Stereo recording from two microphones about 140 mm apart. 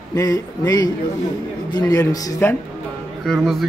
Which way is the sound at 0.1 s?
25° left (ahead or behind).